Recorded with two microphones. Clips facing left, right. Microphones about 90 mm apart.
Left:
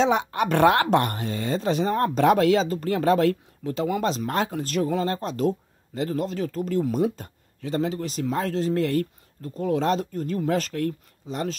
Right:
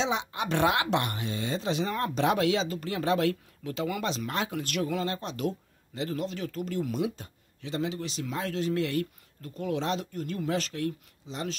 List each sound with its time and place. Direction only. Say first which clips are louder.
0.0 s speech: left 8 dB; 50° left (ahead or behind)